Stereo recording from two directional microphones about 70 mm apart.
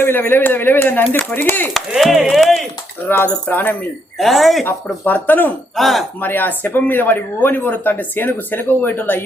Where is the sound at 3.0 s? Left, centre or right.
Left.